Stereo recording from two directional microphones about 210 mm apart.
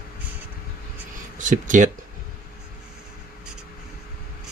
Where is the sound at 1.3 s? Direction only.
35° right (ahead or behind).